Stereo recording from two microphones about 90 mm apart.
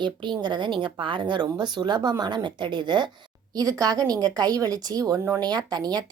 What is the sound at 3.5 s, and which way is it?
A woman's voice, 40° right (ahead or behind).